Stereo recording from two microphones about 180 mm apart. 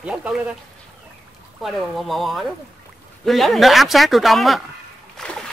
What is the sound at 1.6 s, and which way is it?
Speech, centre (ahead or behind).